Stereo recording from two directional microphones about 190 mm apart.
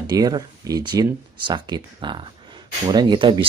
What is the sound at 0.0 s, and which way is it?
Speech, 20° right (ahead or behind).